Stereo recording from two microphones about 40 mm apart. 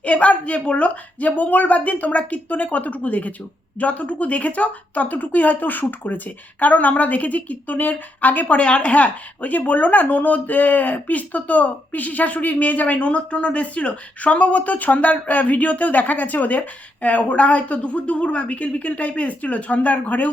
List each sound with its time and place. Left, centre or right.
0.0 s a woman's voice: left